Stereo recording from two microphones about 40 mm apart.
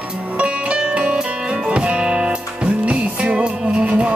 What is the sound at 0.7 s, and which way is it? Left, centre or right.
Music, right.